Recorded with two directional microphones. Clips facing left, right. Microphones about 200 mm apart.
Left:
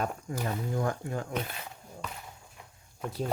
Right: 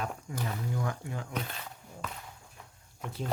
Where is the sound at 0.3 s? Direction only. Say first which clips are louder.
Left 3 dB; 45° left (ahead or behind).